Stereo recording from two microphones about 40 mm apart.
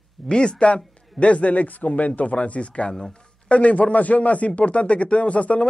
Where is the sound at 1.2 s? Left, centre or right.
Left.